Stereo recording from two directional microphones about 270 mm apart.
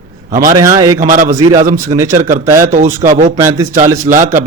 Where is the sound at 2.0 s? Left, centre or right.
Centre.